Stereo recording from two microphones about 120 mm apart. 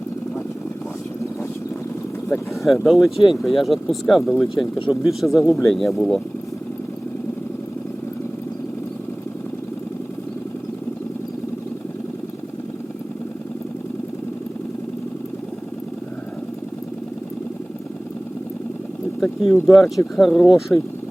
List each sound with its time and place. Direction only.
2.6 s speech: centre (ahead or behind)
5.5 s speech: 25° left (ahead or behind)
5.7 s speech: centre (ahead or behind)
19.2 s boat: centre (ahead or behind)
19.6 s speech: centre (ahead or behind)